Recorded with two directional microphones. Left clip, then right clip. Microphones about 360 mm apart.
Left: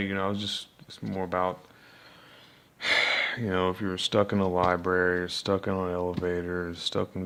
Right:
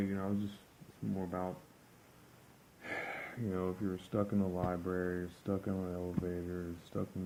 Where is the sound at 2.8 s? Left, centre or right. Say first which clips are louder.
Left 17 dB; left.